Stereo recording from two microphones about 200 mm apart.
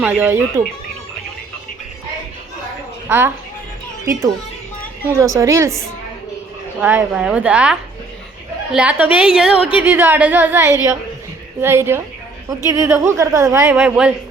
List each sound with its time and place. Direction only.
0.0 s a woman's voice: 10° right (ahead or behind)
3.1 s a woman's voice: 10° right (ahead or behind)
6.7 s a woman's voice: 5° right (ahead or behind)